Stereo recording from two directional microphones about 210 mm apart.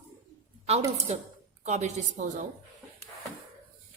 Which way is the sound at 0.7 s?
30° right (ahead or behind).